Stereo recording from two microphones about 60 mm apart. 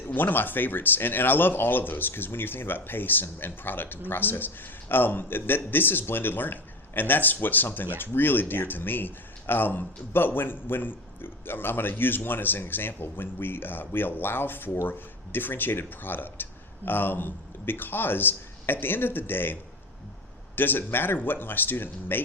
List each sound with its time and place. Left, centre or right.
0.1 s speech: left
20.6 s speech: left